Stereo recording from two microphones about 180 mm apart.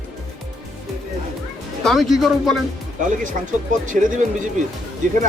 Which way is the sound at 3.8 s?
45° right (ahead or behind).